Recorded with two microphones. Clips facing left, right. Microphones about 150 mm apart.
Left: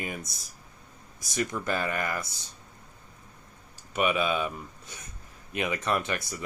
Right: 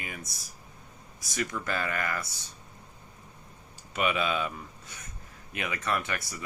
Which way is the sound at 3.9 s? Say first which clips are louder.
Left 2 dB; 15° left (ahead or behind).